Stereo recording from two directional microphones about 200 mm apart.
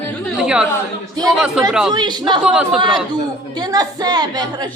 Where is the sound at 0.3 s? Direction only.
5° right (ahead or behind).